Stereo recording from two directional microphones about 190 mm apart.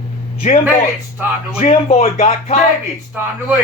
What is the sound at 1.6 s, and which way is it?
Speech, 35° left (ahead or behind).